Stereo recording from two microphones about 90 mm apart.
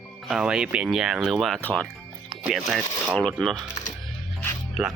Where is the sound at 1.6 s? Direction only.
20° left (ahead or behind).